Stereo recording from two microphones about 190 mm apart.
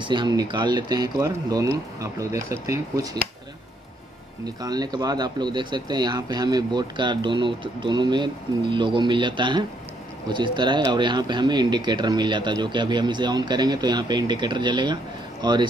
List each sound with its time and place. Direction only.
0.0 s speech: 25° right (ahead or behind)
4.6 s speech: 20° right (ahead or behind)